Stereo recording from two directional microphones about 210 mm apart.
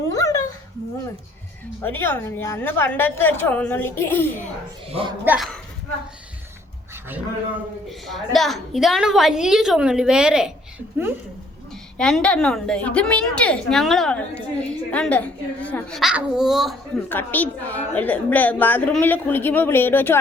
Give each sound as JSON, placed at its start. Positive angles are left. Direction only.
{"t": 0.1, "sound": "a sound", "side_deg": 15}
{"t": 1.8, "sound": "a woman's voice", "side_deg": 10}
{"t": 4.9, "sound": "speech", "side_deg": -25}
{"t": 5.2, "sound": "speech", "side_deg": -10}
{"t": 7.9, "sound": "a woman's voice", "side_deg": 0}
{"t": 11.9, "sound": "a woman's voice", "side_deg": 5}
{"t": 17.1, "sound": "a woman's voice", "side_deg": 10}